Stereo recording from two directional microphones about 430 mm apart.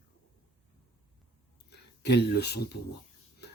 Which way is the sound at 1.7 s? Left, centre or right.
Left.